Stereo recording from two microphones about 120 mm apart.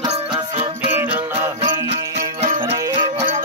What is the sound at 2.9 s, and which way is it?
Music, 45° right (ahead or behind).